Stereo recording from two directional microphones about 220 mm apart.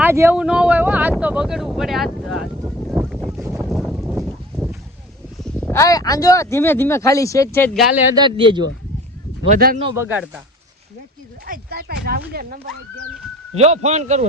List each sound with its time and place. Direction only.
0.0 s speech: 10° right (ahead or behind)
3.1 s a sound: centre (ahead or behind)
5.7 s speech: 15° left (ahead or behind); by 8.1 s 5° right (ahead or behind)
8.1 s speech: 20° right (ahead or behind)
9.5 s speech: 40° right (ahead or behind)
9.9 s speech: 10° right (ahead or behind)
11.4 s a sound: 40° right (ahead or behind)
13.5 s speech: 30° right (ahead or behind)